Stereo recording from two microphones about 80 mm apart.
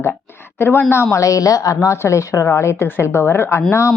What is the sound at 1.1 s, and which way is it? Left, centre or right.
A woman's voice, left.